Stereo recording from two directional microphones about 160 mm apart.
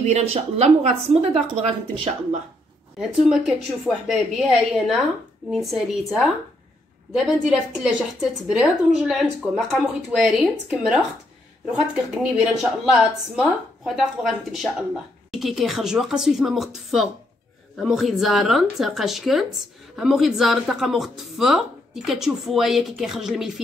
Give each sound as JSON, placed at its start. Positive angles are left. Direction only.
{"t": 0.0, "sound": "a woman's voice", "side_deg": -45}
{"t": 3.0, "sound": "speech", "side_deg": 0}